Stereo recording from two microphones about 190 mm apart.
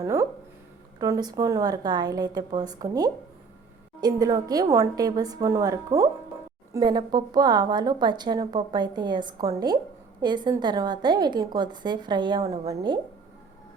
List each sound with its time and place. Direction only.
0.0 s a woman's voice: 15° right (ahead or behind)